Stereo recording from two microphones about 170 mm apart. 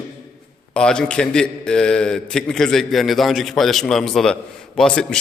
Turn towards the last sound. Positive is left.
turn(degrees=5)  # may be behind; listen again after turning